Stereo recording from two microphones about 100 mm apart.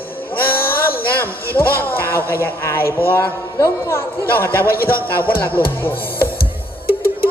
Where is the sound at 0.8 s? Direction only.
20° left (ahead or behind).